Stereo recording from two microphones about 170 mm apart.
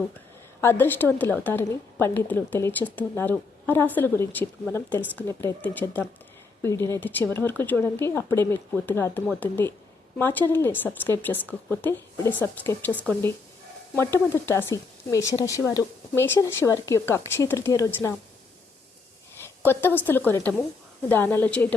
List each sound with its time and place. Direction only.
0.6 s speech: 10° left (ahead or behind)
19.4 s a woman's voice: 10° left (ahead or behind)